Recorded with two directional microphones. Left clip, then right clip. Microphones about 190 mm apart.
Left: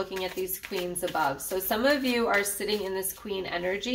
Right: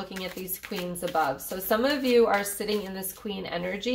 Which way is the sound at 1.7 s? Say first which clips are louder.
Right 1 dB; 35° right (ahead or behind).